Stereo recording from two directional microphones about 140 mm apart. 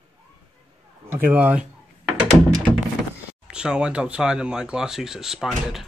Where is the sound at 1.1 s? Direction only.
15° right (ahead or behind).